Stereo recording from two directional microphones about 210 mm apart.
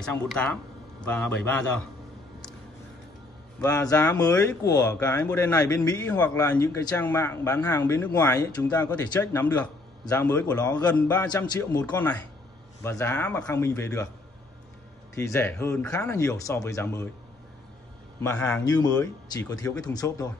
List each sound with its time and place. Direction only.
0.0 s speech: 5° left (ahead or behind)
3.6 s speech: 10° left (ahead or behind)
11.2 s speech: 20° left (ahead or behind)
15.1 s speech: 10° left (ahead or behind)
18.2 s speech: 5° left (ahead or behind)
19.3 s speech: 15° left (ahead or behind)